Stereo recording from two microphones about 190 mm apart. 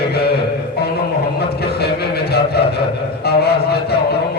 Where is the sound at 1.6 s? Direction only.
55° left (ahead or behind).